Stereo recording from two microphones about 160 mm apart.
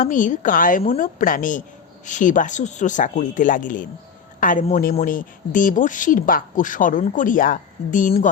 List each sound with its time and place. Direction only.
0.0 s a man's voice: 55° left (ahead or behind)